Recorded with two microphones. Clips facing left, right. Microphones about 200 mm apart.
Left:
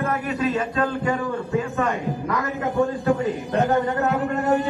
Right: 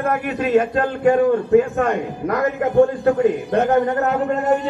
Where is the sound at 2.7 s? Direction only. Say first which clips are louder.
Right 6 dB; 60° right (ahead or behind).